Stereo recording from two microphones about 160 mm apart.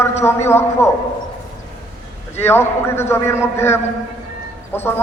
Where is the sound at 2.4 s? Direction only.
15° left (ahead or behind).